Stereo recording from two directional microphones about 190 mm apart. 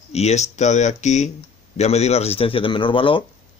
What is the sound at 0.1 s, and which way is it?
A man's voice, 35° left (ahead or behind).